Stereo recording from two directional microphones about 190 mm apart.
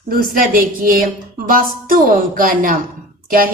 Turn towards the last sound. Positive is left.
turn(degrees=-50)  # may be behind; listen again after turning